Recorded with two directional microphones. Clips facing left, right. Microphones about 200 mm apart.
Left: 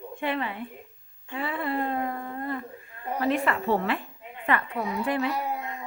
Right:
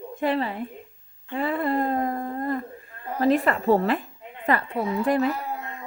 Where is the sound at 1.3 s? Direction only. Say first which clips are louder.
Right 5 dB; 45° right (ahead or behind).